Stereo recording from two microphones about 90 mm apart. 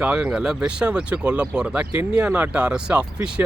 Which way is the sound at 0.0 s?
10° right (ahead or behind).